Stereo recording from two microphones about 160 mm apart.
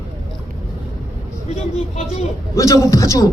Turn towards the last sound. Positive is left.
turn(degrees=20)  # may be behind; listen again after turning